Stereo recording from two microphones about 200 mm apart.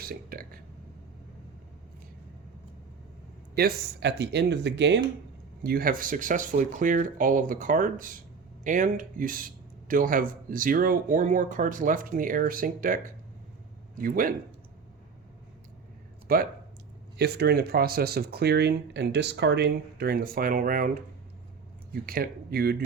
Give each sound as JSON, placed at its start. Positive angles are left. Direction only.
{"t": 0.0, "sound": "a sound", "side_deg": -50}
{"t": 3.5, "sound": "speech", "side_deg": -55}
{"t": 5.6, "sound": "speech", "side_deg": -45}
{"t": 14.0, "sound": "speech", "side_deg": -45}
{"t": 16.2, "sound": "speech", "side_deg": -45}
{"t": 22.0, "sound": "speech", "side_deg": -50}